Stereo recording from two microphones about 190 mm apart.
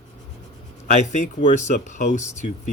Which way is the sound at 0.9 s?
40° left (ahead or behind).